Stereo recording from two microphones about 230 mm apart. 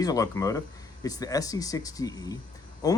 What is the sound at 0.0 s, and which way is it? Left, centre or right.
Speech, centre.